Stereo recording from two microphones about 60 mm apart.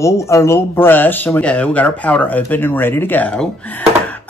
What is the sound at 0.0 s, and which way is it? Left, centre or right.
Speech, left.